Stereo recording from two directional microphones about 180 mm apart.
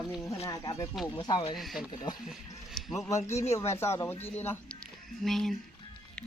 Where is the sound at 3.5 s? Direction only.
15° left (ahead or behind).